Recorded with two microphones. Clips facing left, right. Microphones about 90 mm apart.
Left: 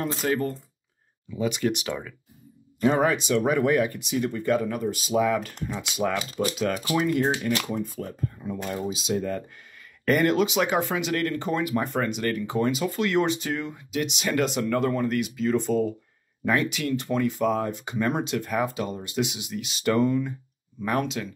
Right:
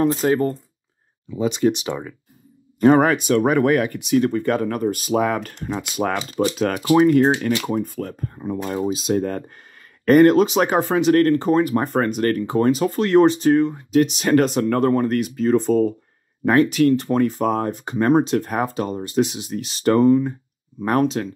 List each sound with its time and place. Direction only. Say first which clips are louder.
0.0 s speech: right 8 dB; 35° right (ahead or behind)
2.8 s speech: right 7 dB; 55° right (ahead or behind)
6.1 s speech: right 6 dB; 30° right (ahead or behind)
6.6 s speech: right 11 dB; 45° right (ahead or behind)
8.4 s speech: right 8 dB; 45° right (ahead or behind)